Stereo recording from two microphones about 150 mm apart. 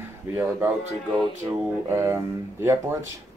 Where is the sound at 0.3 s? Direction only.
10° right (ahead or behind).